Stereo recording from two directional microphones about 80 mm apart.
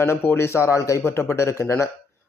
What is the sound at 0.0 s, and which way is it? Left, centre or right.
A man's voice, left.